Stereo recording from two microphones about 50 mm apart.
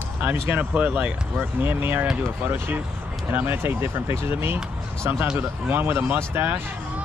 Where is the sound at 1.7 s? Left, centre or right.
Right.